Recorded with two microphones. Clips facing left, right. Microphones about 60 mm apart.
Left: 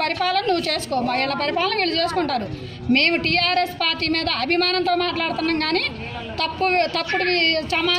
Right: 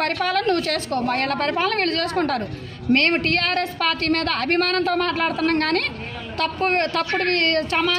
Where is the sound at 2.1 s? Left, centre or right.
Right.